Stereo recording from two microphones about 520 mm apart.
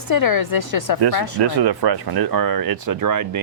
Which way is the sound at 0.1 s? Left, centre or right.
Left.